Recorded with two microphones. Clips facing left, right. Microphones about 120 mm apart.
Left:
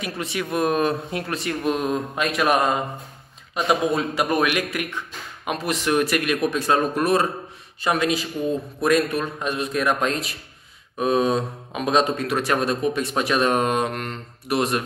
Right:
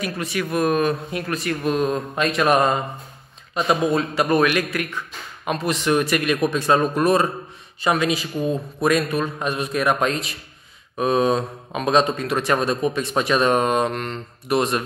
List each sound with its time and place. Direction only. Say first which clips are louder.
0.2 s speech: right 1 dB; 25° left (ahead or behind); by 14.8 s 5° left (ahead or behind)